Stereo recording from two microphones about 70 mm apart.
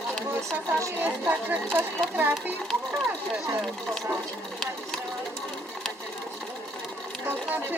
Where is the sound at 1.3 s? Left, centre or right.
Right.